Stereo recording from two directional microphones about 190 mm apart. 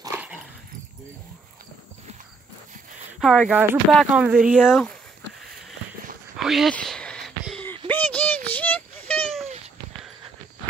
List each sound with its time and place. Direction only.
0.0 s dog: 10° right (ahead or behind)
3.2 s speech: centre (ahead or behind)
6.3 s a sound: centre (ahead or behind)